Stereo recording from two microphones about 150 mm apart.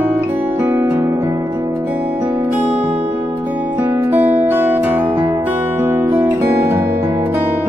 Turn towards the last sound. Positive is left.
turn(degrees=-15)  # may be behind; listen again after turning